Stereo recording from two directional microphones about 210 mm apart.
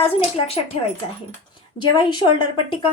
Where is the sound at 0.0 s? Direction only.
30° left (ahead or behind).